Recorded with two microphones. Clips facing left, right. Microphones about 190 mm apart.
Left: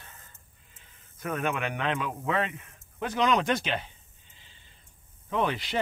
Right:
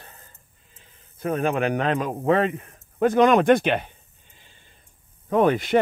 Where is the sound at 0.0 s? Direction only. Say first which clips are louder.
Right 4 dB; 35° right (ahead or behind).